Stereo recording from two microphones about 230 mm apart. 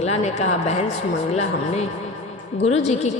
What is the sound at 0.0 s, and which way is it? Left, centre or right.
A woman's voice, left.